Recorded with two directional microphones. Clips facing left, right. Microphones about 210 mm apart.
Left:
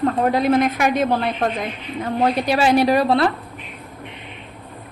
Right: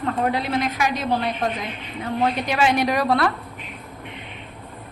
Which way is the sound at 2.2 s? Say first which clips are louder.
Left 3 dB; 35° left (ahead or behind).